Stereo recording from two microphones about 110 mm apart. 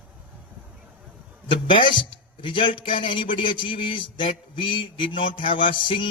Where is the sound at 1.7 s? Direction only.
50° left (ahead or behind).